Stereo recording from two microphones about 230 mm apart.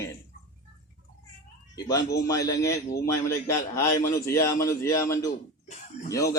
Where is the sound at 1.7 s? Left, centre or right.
Centre.